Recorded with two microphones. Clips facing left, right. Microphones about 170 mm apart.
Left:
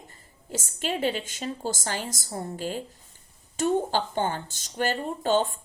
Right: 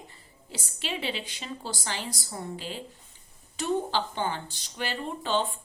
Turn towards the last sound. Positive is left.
turn(degrees=45)  # may be behind; listen again after turning